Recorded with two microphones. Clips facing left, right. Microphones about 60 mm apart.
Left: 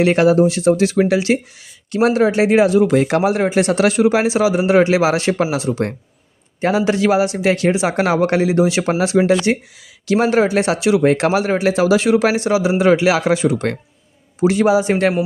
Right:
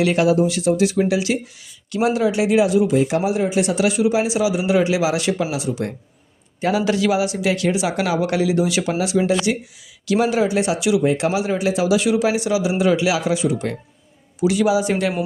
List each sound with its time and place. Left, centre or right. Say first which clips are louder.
0.0 s a man's voice: left 4 dB; left
2.8 s a man's voice: left 3 dB; left
14.3 s a man's voice: left 3 dB; left